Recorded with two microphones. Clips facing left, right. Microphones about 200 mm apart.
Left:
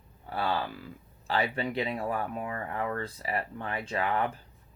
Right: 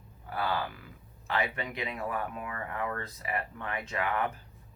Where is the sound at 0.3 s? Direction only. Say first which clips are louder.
Left 2 dB; 30° left (ahead or behind).